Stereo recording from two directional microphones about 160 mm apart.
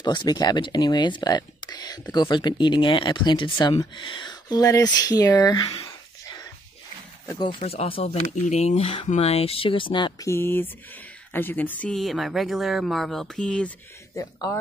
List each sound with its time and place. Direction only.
0.0 s speech: 25° left (ahead or behind)
7.2 s speech: 30° left (ahead or behind); by 13.7 s 5° left (ahead or behind)
14.1 s speech: 20° left (ahead or behind)